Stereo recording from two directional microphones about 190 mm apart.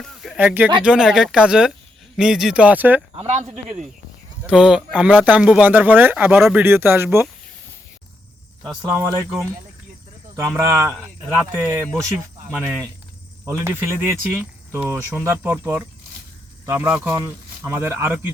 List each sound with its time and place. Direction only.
0.0 s a sound: centre (ahead or behind)
0.3 s speech: 10° right (ahead or behind)
3.2 s speech: 35° right (ahead or behind)
4.4 s speech: 5° right (ahead or behind)
8.8 s speech: 15° right (ahead or behind)
10.6 s speech: 15° right (ahead or behind)